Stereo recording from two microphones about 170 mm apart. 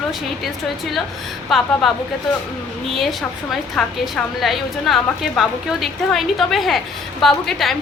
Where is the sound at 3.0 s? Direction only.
Centre (ahead or behind).